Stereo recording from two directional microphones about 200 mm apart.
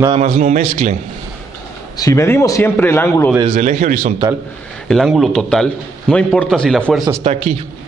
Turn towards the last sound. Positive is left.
turn(degrees=-35)  # may be behind; listen again after turning